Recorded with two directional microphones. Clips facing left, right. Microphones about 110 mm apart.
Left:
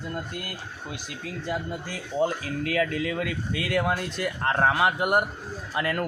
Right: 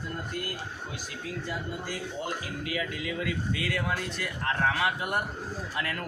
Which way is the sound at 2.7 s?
55° left (ahead or behind).